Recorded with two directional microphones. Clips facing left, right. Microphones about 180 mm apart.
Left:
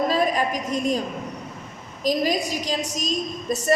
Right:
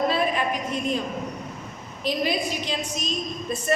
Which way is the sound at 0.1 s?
40° left (ahead or behind).